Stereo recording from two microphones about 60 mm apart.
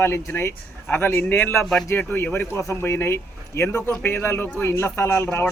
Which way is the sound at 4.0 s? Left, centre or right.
Left.